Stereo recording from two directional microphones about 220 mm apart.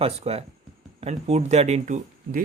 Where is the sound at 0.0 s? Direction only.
30° right (ahead or behind).